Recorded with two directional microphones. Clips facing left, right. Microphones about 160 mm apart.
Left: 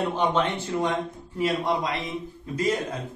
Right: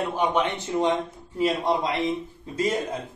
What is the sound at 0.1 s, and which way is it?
A man's voice, 10° right (ahead or behind).